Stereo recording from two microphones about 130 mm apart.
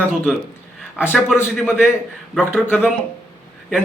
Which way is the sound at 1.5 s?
5° right (ahead or behind).